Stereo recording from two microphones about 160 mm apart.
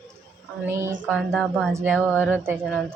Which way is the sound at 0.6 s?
15° right (ahead or behind).